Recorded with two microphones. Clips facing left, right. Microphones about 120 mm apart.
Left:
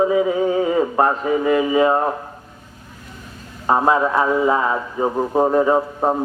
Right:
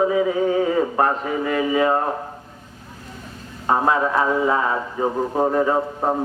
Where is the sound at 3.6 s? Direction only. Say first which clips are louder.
Left 2 dB; 25° left (ahead or behind).